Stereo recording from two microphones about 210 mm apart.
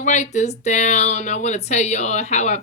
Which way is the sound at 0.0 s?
35° left (ahead or behind).